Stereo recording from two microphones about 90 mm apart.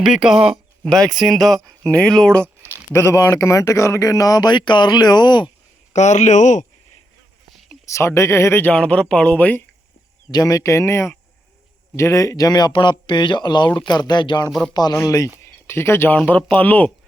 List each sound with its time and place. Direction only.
0.0 s speech: 5° right (ahead or behind)
0.3 s speech: 90° right
0.9 s speech: 5° left (ahead or behind)
2.9 s speech: 30° left (ahead or behind); by 5.5 s 55° left (ahead or behind)
7.9 s speech: 30° left (ahead or behind)
8.6 s speech: 10° left (ahead or behind)
10.3 s speech: 40° left (ahead or behind)
15.6 s speech: 30° left (ahead or behind)
16.1 s speech: 15° left (ahead or behind)